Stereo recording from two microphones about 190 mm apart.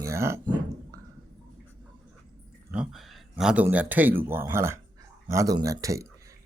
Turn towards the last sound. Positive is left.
turn(degrees=-15)  # may be behind; listen again after turning